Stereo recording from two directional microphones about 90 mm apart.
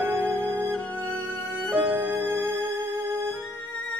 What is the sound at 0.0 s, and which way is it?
Music, 30° right (ahead or behind).